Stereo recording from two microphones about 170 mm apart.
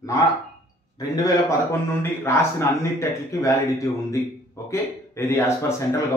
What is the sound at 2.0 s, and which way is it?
A man's voice, 15° left (ahead or behind).